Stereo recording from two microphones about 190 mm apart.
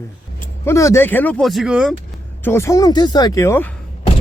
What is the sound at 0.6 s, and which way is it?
Speech, 15° left (ahead or behind).